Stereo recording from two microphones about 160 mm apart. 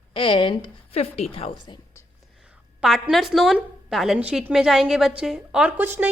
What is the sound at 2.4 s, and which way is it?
A woman's voice, centre (ahead or behind).